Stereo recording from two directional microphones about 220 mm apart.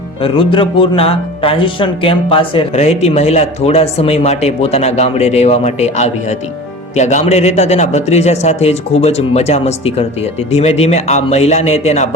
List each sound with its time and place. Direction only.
0.2 s a man's voice: 25° left (ahead or behind)